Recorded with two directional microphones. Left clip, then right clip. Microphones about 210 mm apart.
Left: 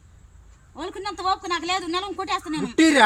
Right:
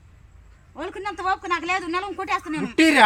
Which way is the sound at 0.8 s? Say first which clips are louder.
Right 1 dB; 30° left (ahead or behind).